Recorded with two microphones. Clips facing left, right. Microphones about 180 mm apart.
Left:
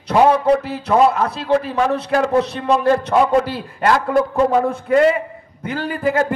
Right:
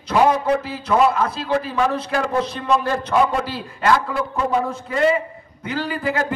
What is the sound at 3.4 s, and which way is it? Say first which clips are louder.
A man's voice: left 2 dB; 55° left (ahead or behind).